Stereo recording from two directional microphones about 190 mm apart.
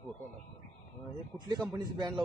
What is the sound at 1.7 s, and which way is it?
Speech, 20° right (ahead or behind).